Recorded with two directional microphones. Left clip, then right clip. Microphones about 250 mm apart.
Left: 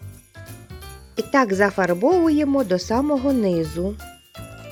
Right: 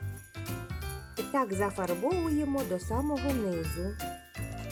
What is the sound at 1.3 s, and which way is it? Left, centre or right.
Speech, left.